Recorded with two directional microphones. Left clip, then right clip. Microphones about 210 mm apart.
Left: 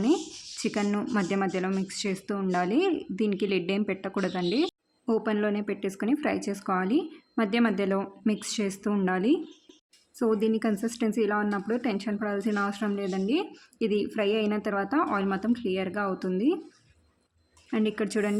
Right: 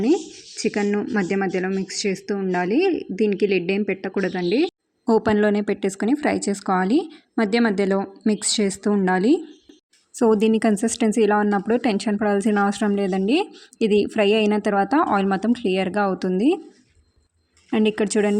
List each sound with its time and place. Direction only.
0.6 s speech: 10° right (ahead or behind)
5.0 s speech: 30° right (ahead or behind)
17.7 s speech: 25° right (ahead or behind)